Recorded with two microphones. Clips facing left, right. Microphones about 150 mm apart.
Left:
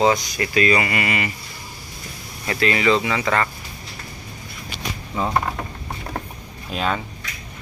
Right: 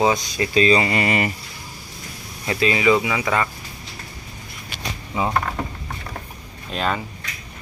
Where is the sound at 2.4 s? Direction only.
20° right (ahead or behind).